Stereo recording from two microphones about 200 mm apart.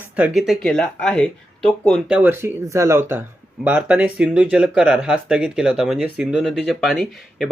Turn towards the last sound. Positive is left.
turn(degrees=0)  # may be behind; listen again after turning